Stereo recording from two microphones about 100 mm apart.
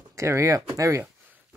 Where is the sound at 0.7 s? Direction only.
35° right (ahead or behind).